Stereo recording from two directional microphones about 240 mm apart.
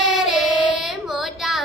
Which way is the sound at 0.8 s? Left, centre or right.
Centre.